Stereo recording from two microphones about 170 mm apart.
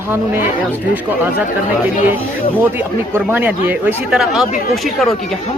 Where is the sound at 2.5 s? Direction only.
10° right (ahead or behind).